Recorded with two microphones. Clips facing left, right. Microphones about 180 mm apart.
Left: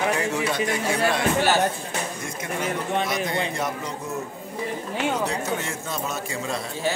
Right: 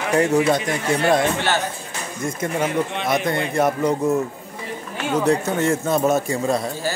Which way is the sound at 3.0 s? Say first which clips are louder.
Right 5 dB; 55° right (ahead or behind).